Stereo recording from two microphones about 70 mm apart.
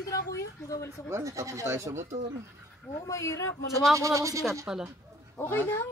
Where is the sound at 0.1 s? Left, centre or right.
Left.